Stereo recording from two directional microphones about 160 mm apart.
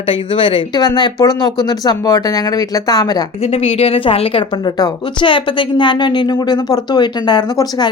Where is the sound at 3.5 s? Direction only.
40° left (ahead or behind).